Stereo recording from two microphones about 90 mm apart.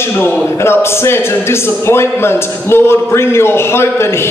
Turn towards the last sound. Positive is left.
turn(degrees=30)  # may be behind; listen again after turning